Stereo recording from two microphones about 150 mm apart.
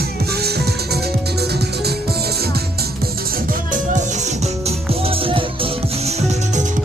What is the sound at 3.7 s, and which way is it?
Music, 50° right (ahead or behind).